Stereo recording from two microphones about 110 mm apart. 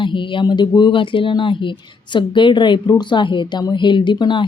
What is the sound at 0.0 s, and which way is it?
Speech, 50° left (ahead or behind).